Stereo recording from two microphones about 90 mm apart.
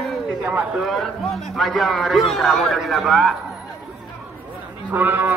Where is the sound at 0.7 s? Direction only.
Centre (ahead or behind).